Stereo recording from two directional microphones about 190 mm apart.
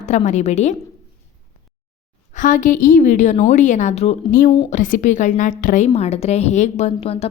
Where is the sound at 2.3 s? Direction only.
40° left (ahead or behind).